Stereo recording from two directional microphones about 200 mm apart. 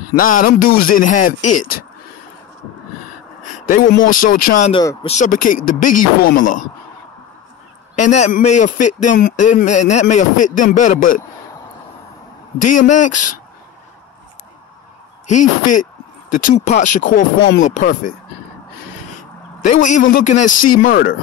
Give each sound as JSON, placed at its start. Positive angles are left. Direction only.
{"t": 0.1, "sound": "speech", "side_deg": 45}
{"t": 3.6, "sound": "speech", "side_deg": 45}
{"t": 4.7, "sound": "a man's voice", "side_deg": 25}
{"t": 8.0, "sound": "a man's voice", "side_deg": 35}
{"t": 12.5, "sound": "a man's voice", "side_deg": 40}
{"t": 15.2, "sound": "a man's voice", "side_deg": 40}
{"t": 17.4, "sound": "speech", "side_deg": 70}
{"t": 17.7, "sound": "speech", "side_deg": 45}
{"t": 19.6, "sound": "a man's voice", "side_deg": 40}